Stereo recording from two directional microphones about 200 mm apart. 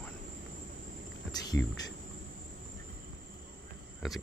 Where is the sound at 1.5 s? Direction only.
10° left (ahead or behind).